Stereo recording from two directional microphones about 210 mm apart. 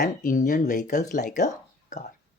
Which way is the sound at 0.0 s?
40° left (ahead or behind).